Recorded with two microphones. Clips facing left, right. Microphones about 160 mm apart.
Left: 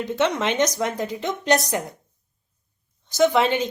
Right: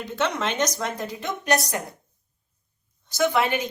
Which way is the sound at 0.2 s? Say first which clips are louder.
Left 3 dB; 20° left (ahead or behind).